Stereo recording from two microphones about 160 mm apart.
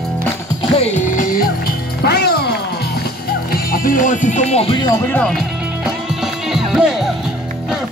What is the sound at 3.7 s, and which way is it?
Music, 60° left (ahead or behind).